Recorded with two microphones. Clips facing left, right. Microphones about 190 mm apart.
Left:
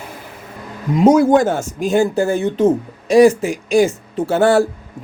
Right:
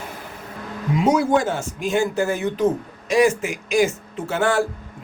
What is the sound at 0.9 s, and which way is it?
Speech, 45° left (ahead or behind).